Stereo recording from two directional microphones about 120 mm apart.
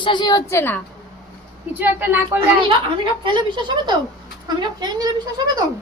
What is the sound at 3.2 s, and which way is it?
A woman's voice, 40° right (ahead or behind).